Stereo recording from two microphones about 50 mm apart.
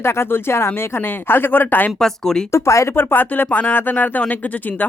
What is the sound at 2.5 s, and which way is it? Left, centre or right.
Speech, left.